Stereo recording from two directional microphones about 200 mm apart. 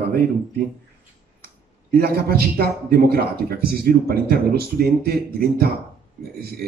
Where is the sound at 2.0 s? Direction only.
50° right (ahead or behind).